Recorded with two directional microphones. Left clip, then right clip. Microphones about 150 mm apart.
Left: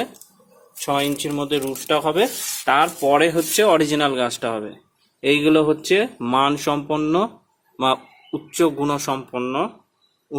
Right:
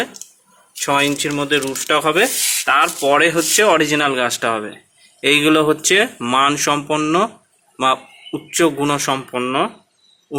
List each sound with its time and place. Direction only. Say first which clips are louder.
0.9 s speech: right 5 dB; 5° left (ahead or behind)
2.6 s speech: right 2 dB; 30° left (ahead or behind); by 9.7 s 5° left (ahead or behind)